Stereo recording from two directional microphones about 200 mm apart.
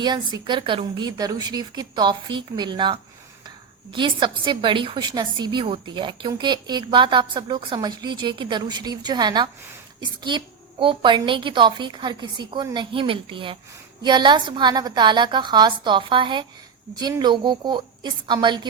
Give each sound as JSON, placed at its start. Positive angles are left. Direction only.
{"t": 0.0, "sound": "a woman's voice", "side_deg": -20}